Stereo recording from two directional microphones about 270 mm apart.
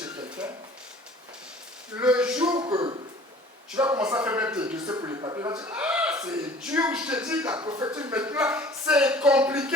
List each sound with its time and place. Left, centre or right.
0.3 s a sound: centre
2.0 s a man's voice: centre
2.6 s a man's voice: centre